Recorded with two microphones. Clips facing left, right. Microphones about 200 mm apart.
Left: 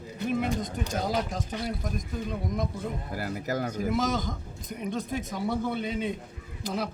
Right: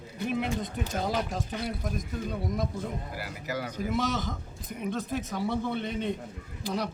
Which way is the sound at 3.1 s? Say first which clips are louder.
Left 4 dB; 45° left (ahead or behind).